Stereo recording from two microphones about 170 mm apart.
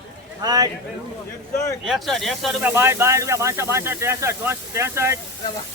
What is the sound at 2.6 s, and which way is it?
Speech, 15° right (ahead or behind).